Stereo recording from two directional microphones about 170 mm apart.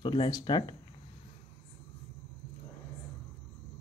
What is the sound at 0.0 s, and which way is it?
Speech, 30° left (ahead or behind).